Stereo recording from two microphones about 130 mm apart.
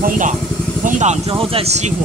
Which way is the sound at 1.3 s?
45° right (ahead or behind).